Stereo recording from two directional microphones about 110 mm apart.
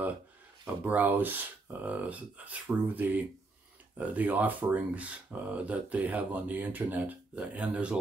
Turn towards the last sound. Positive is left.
turn(degrees=-10)  # may be behind; listen again after turning